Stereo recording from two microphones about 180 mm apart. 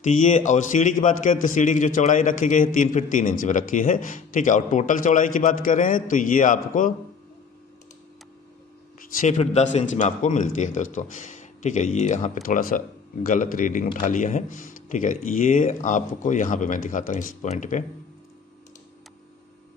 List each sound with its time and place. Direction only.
0.0 s a man's voice: 45° left (ahead or behind)
9.2 s a man's voice: 40° left (ahead or behind)